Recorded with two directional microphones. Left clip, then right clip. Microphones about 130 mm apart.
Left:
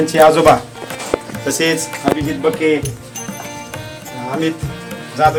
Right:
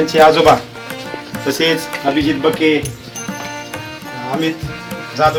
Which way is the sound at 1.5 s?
20° left (ahead or behind).